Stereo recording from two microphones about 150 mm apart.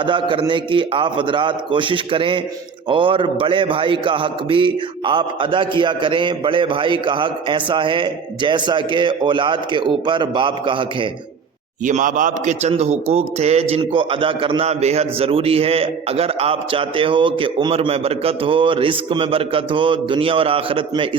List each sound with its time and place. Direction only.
0.0 s a man's voice: 35° right (ahead or behind)
11.9 s a man's voice: 55° right (ahead or behind); by 21.2 s 35° right (ahead or behind)